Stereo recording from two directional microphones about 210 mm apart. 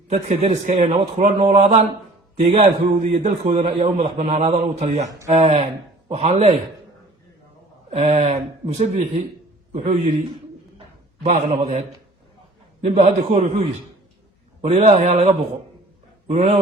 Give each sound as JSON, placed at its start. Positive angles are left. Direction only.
{"t": 0.1, "sound": "a man's voice", "side_deg": -30}
{"t": 7.9, "sound": "a man's voice", "side_deg": -30}
{"t": 10.8, "sound": "a sound", "side_deg": -30}
{"t": 12.8, "sound": "a man's voice", "side_deg": -30}